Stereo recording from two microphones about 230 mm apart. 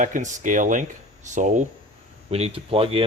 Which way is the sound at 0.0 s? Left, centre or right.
Right.